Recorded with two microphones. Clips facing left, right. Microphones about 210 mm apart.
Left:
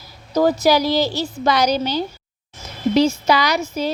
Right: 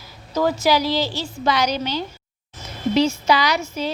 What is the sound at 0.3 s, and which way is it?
A woman's voice, 40° left (ahead or behind).